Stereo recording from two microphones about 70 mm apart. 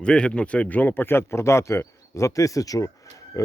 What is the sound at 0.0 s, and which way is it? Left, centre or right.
A man's voice, centre.